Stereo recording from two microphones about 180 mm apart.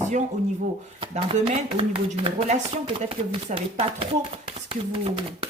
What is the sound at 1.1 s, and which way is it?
Speech, 30° right (ahead or behind).